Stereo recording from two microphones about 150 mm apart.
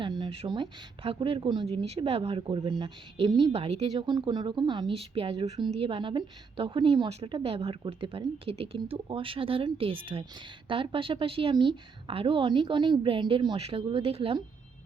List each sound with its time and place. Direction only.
0.0 s a woman's voice: 30° right (ahead or behind)
3.9 s a woman's voice: 30° right (ahead or behind)
7.1 s a woman's voice: 40° right (ahead or behind)